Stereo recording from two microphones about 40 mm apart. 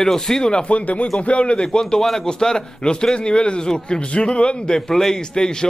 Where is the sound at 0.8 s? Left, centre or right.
Left.